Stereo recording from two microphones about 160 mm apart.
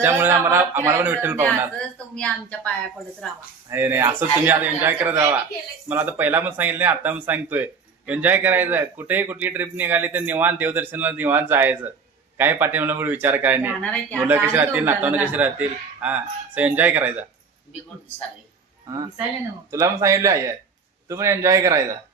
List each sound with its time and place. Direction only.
0.0 s speech: 15° right (ahead or behind)
1.8 s a woman's voice: 5° left (ahead or behind)
3.7 s speech: 15° right (ahead or behind)
13.8 s speech: 10° left (ahead or behind)
14.2 s speech: 10° right (ahead or behind)
18.9 s a man's voice: 25° right (ahead or behind)